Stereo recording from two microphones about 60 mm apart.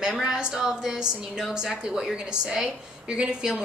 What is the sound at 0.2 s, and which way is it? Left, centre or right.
A woman's voice, centre.